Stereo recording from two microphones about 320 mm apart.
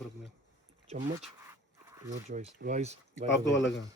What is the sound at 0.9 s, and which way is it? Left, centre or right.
Speech, centre.